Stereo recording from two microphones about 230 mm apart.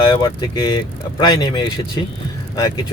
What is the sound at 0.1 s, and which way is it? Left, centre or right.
Speech, centre.